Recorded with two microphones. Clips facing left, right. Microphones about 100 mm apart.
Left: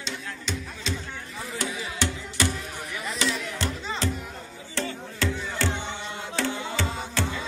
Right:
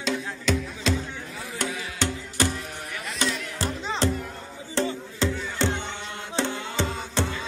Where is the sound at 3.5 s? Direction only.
35° right (ahead or behind).